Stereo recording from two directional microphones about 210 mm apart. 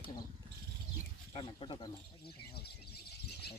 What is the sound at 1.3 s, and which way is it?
Speech, 25° left (ahead or behind).